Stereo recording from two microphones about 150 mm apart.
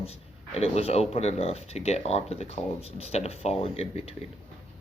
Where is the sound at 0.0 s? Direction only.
45° left (ahead or behind).